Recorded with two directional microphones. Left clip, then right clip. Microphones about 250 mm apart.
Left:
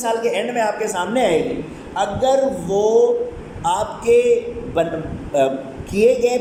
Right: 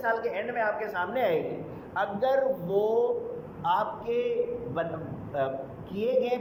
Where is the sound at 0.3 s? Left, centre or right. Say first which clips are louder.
Left 10 dB; centre.